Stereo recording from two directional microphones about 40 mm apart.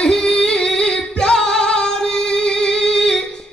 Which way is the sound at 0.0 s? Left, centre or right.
Left.